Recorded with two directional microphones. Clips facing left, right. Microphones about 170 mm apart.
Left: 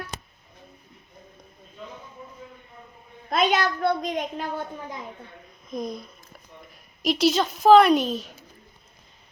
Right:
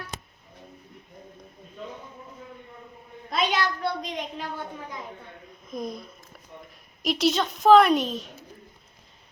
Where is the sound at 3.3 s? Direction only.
50° left (ahead or behind).